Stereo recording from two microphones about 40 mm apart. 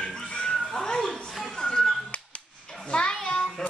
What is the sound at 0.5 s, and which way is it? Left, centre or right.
A child's voice, centre.